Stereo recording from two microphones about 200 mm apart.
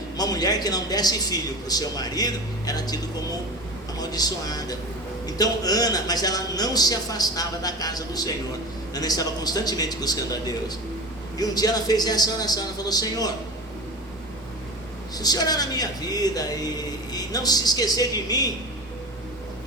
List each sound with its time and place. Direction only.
0.2 s speech: 20° left (ahead or behind)
15.2 s speech: 20° left (ahead or behind)